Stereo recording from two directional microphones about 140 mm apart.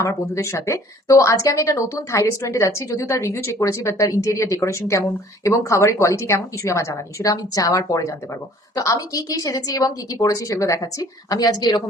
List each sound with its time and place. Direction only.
0.0 s speech: 20° left (ahead or behind)